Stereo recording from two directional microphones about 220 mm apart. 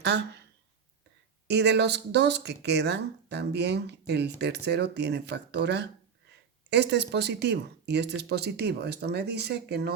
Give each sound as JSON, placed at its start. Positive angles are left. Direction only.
{"t": 0.0, "sound": "speech", "side_deg": -50}
{"t": 1.5, "sound": "speech", "side_deg": -50}